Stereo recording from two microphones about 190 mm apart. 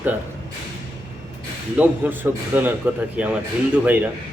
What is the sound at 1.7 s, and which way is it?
A man's voice, 10° right (ahead or behind).